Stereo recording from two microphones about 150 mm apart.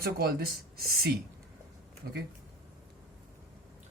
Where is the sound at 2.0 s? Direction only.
75° right (ahead or behind).